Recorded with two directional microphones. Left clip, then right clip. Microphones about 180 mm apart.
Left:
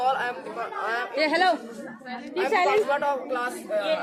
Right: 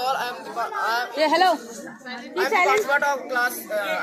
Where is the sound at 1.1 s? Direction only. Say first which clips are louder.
Right 3 dB; 45° right (ahead or behind).